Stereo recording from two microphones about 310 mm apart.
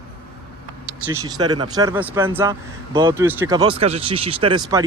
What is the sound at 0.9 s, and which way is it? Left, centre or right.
Speech, centre.